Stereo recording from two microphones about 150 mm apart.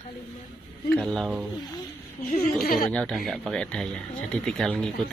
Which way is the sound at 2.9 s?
5° left (ahead or behind).